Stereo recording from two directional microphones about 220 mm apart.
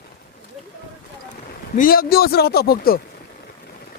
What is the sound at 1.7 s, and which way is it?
Speech, 40° left (ahead or behind).